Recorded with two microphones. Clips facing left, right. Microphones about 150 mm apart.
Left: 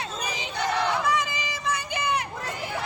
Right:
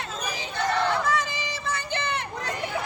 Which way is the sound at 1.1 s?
15° left (ahead or behind).